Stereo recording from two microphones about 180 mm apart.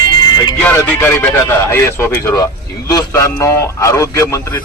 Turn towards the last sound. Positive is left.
turn(degrees=15)  # may be behind; listen again after turning